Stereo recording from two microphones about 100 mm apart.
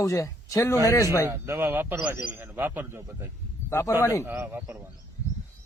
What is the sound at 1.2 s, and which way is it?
A man's voice, 25° right (ahead or behind).